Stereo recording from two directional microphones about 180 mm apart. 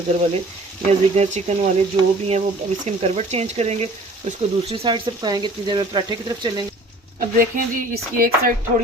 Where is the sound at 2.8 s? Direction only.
35° right (ahead or behind).